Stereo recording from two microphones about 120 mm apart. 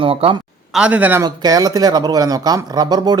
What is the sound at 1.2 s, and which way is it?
Speech, 30° right (ahead or behind).